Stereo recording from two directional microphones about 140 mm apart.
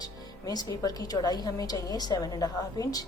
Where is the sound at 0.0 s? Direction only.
25° left (ahead or behind).